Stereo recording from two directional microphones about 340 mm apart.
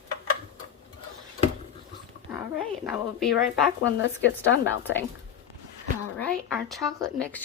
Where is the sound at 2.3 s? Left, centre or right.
Centre.